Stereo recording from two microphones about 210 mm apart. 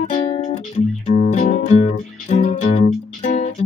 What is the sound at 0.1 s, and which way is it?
Music, 40° left (ahead or behind).